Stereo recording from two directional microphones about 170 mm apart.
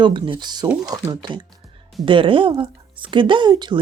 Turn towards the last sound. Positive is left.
turn(degrees=-25)  # may be behind; listen again after turning